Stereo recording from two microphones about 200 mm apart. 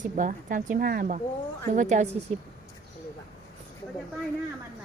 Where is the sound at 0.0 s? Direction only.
40° right (ahead or behind).